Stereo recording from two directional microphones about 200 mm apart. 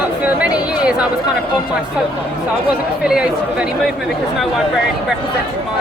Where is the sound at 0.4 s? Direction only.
5° right (ahead or behind).